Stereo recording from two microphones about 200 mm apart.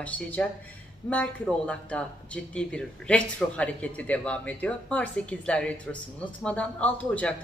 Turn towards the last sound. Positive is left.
turn(degrees=5)  # may be behind; listen again after turning